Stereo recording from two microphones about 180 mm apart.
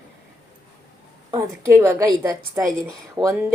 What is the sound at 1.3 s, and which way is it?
A woman's voice, 15° right (ahead or behind).